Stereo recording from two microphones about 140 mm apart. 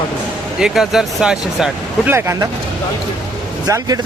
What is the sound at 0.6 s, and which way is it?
Speech, 5° right (ahead or behind).